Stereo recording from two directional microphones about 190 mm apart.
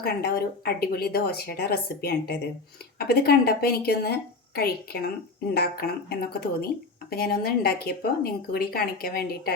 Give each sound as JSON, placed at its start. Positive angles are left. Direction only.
{"t": 0.0, "sound": "a woman's voice", "side_deg": 55}